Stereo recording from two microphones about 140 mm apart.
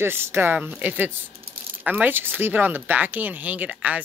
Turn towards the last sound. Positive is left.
turn(degrees=-10)  # may be behind; listen again after turning